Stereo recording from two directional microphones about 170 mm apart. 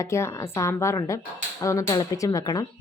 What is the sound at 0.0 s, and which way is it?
A woman's voice, 15° left (ahead or behind).